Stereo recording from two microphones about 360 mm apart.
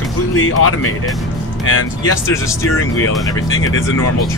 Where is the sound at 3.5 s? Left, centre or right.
Left.